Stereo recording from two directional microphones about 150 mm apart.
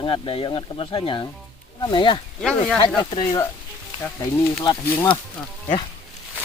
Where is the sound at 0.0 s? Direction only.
40° left (ahead or behind).